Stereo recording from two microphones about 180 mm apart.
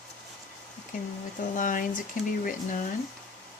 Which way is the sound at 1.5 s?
45° left (ahead or behind).